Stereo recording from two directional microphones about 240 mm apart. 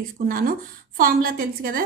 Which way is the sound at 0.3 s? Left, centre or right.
Right.